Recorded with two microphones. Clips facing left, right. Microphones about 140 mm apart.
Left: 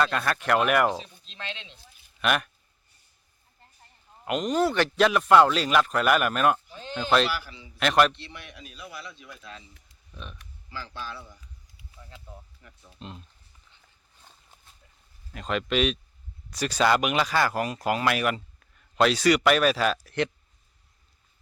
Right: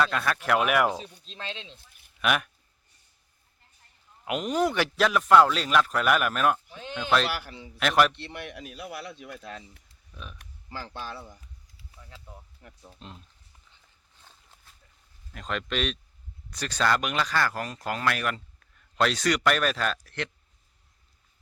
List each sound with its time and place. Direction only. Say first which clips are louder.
0.0 s speech: left 1 dB; centre (ahead or behind)
1.2 s speech: right 1 dB; 35° right (ahead or behind)
2.2 s speech: left 1 dB; 5° right (ahead or behind)
4.3 s speech: left 2 dB; 10° right (ahead or behind)
4.9 s speech: left 1 dB; centre (ahead or behind)
7.3 s a man's voice: left 1 dB; 55° right (ahead or behind)
7.8 s speech: left 1 dB; centre (ahead or behind)
8.1 s a man's voice: right 6 dB; 60° right (ahead or behind)
11.9 s speech: left 1 dB; centre (ahead or behind)
12.6 s speech: right 3 dB; 40° right (ahead or behind)
13.0 s speech: left 5 dB; centre (ahead or behind)
15.3 s speech: left 4 dB; 5° left (ahead or behind)